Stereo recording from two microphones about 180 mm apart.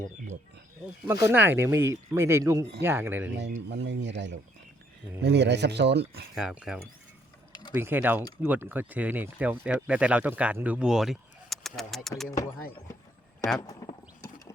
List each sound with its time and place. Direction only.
1.0 s speech: 15° right (ahead or behind)
3.7 s speech: 75° right (ahead or behind)
6.3 s speech: 5° right (ahead or behind)
13.6 s clip-clop: 20° left (ahead or behind)